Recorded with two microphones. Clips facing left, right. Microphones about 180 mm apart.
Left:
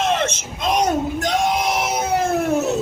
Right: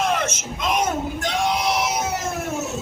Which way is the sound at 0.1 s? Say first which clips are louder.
Left 3 dB; 30° left (ahead or behind).